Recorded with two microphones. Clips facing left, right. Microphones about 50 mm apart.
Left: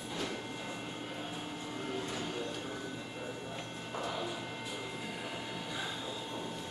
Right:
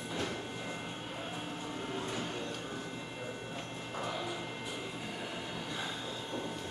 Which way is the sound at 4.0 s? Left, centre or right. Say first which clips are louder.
Even; centre.